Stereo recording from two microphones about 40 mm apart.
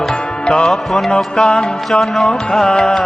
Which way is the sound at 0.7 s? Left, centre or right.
Centre.